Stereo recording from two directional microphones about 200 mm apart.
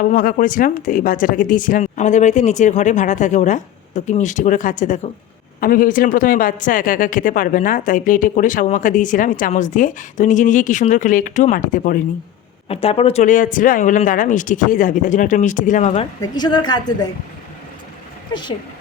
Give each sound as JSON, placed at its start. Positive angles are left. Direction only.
{"t": 0.0, "sound": "speech", "side_deg": 40}
{"t": 12.6, "sound": "speech", "side_deg": 30}
{"t": 16.2, "sound": "a woman's voice", "side_deg": 20}
{"t": 18.3, "sound": "a woman's voice", "side_deg": 20}